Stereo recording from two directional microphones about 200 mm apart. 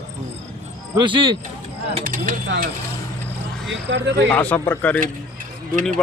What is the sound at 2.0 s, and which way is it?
Speech, 45° right (ahead or behind).